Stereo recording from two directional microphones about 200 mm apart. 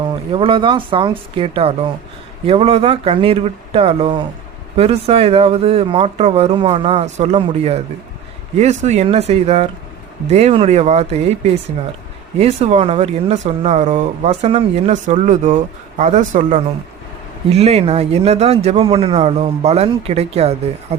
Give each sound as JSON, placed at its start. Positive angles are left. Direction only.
{"t": 0.3, "sound": "speech", "side_deg": -25}